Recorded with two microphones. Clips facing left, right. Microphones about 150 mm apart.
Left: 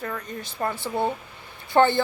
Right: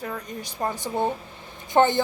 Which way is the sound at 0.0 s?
10° right (ahead or behind).